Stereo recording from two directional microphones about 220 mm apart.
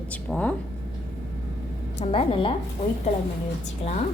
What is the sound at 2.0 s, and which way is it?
Speech, 25° left (ahead or behind).